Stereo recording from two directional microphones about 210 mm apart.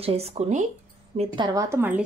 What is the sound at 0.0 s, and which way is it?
A woman's voice, 30° right (ahead or behind).